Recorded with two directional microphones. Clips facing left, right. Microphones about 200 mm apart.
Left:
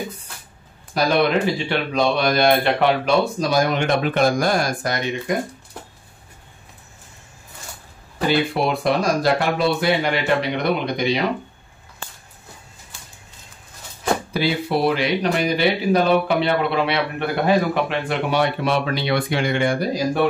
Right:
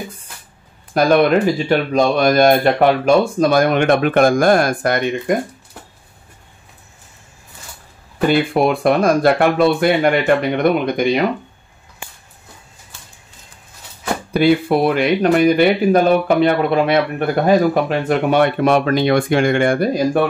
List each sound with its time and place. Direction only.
0.9 s speech: 45° right (ahead or behind)
8.3 s speech: 50° right (ahead or behind)
14.3 s speech: 55° right (ahead or behind)